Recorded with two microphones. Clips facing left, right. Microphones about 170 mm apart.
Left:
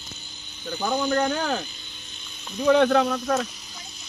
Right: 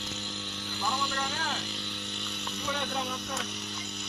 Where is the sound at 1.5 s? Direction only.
85° right.